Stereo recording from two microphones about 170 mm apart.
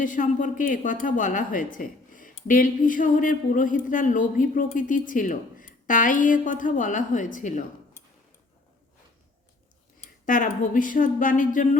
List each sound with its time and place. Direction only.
0.0 s speech: 50° left (ahead or behind)
10.2 s speech: 50° left (ahead or behind)